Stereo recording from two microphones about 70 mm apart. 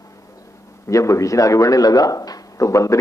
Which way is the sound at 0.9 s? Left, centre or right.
Left.